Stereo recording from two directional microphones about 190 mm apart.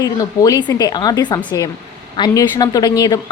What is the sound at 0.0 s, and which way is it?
A woman's voice, 20° left (ahead or behind).